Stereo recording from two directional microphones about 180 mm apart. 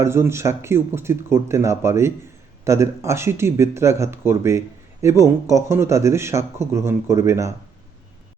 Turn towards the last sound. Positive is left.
turn(degrees=-15)  # may be behind; listen again after turning